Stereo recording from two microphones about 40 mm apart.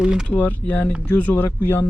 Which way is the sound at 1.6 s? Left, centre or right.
Left.